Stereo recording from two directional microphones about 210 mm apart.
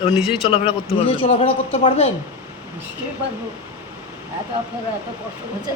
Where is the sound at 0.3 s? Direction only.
25° left (ahead or behind).